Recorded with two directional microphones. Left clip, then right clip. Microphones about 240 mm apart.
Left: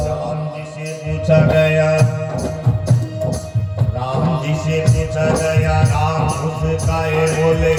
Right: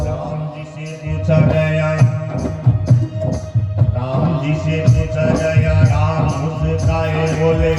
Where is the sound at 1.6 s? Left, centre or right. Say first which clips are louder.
Left 4 dB; left.